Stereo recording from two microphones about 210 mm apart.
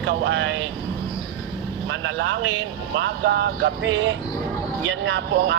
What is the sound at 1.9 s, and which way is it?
Speech, 60° right (ahead or behind).